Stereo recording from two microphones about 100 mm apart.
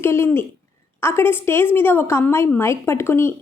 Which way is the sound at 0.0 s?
25° left (ahead or behind).